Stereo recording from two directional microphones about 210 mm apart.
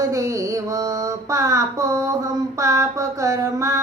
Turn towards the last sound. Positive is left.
turn(degrees=-15)  # may be behind; listen again after turning